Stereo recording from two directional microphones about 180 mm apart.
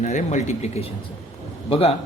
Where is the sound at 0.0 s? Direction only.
45° left (ahead or behind).